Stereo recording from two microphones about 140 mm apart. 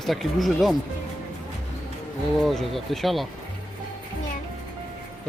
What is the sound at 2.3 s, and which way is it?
Speech, centre (ahead or behind).